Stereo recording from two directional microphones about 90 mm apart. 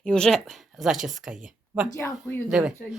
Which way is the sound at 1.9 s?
30° left (ahead or behind).